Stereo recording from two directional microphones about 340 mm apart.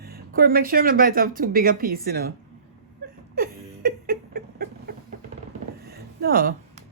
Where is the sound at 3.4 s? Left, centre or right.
Right.